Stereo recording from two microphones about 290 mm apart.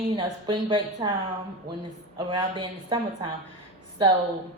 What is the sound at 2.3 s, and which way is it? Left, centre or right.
Speech, centre.